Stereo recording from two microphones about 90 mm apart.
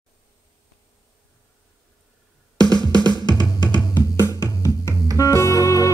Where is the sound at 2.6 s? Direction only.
50° right (ahead or behind).